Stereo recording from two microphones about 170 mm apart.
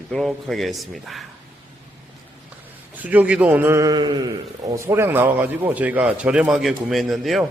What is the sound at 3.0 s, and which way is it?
A man's voice, 10° right (ahead or behind).